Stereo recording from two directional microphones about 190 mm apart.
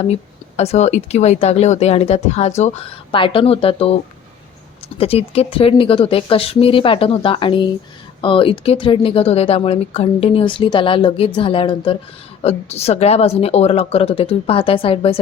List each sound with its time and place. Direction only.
0.0 s speech: 35° left (ahead or behind)
4.9 s speech: 30° left (ahead or behind)